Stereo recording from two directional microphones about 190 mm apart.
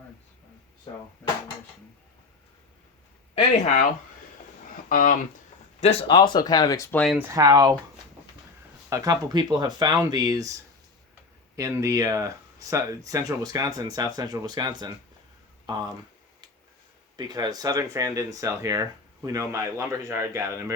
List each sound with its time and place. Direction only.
4.9 s speech: 45° left (ahead or behind)
5.8 s speech: 30° left (ahead or behind)
7.0 s speech: centre (ahead or behind)
7.3 s speech: 20° right (ahead or behind)
8.9 s speech: 20° right (ahead or behind)
11.5 s speech: 15° right (ahead or behind)
17.2 s speech: 20° right (ahead or behind)